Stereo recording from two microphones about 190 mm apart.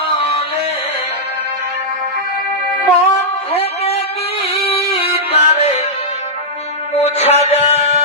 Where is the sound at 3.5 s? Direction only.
30° left (ahead or behind).